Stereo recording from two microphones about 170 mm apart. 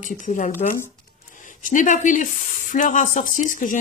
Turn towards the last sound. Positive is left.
turn(degrees=50)  # may be behind; listen again after turning